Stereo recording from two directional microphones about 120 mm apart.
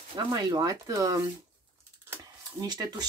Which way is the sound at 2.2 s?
35° right (ahead or behind).